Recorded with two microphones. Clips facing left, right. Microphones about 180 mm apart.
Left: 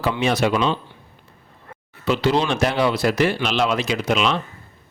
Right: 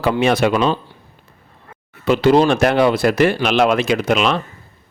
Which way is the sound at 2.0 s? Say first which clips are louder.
Right 7 dB; 50° right (ahead or behind).